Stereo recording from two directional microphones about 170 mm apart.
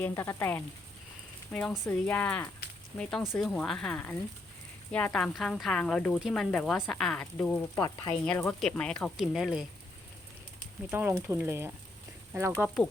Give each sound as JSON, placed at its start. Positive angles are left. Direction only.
{"t": 0.0, "sound": "speech", "side_deg": 15}
{"t": 1.5, "sound": "speech", "side_deg": 0}
{"t": 7.8, "sound": "speech", "side_deg": 25}
{"t": 8.2, "sound": "speech", "side_deg": 5}
{"t": 10.9, "sound": "speech", "side_deg": -15}
{"t": 12.6, "sound": "speech", "side_deg": 10}